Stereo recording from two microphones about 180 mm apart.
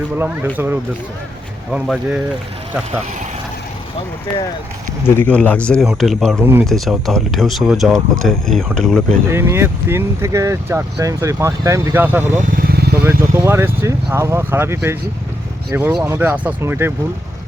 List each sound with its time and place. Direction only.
0.5 s speech: 10° right (ahead or behind)
5.0 s speech: 10° left (ahead or behind)
6.4 s speech: 10° right (ahead or behind)
6.7 s speech: centre (ahead or behind)
9.3 s speech: 15° right (ahead or behind)
12.4 s vehicle: 50° right (ahead or behind)
13.1 s speech: 15° right (ahead or behind)